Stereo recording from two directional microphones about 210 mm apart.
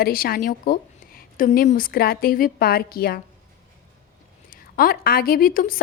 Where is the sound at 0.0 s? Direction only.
45° left (ahead or behind).